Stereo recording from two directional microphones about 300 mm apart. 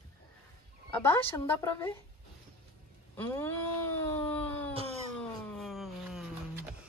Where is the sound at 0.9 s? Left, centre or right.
Centre.